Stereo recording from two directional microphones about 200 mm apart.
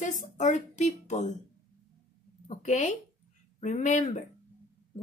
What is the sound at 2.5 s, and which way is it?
A woman's voice, 35° left (ahead or behind).